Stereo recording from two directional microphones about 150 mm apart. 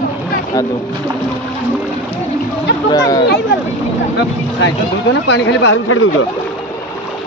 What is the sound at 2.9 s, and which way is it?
Speech, 25° left (ahead or behind).